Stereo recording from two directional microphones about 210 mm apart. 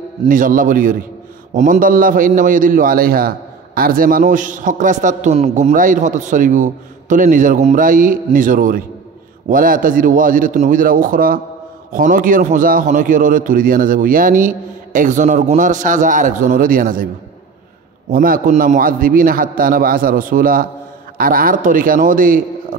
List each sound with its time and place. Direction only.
0.2 s a man's voice: 40° right (ahead or behind)
18.1 s a man's voice: 45° right (ahead or behind)